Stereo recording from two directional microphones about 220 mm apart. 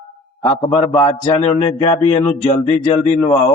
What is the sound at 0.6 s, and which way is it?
A man's voice, 15° left (ahead or behind).